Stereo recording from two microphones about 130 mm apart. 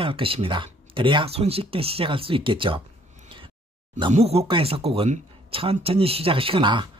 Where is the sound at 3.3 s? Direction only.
40° right (ahead or behind).